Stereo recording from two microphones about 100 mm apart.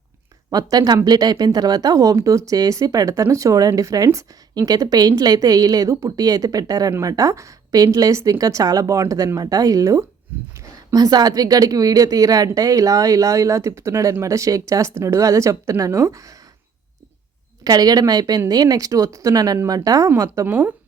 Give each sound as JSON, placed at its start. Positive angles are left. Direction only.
{"t": 0.5, "sound": "speech", "side_deg": -40}
{"t": 17.6, "sound": "speech", "side_deg": -40}